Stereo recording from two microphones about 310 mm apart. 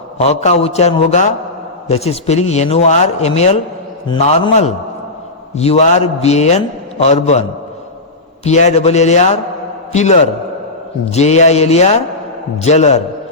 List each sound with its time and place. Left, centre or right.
0.2 s speech: centre
8.4 s speech: left